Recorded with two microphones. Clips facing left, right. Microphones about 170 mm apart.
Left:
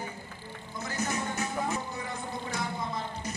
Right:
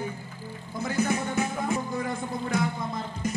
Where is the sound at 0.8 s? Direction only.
55° right (ahead or behind).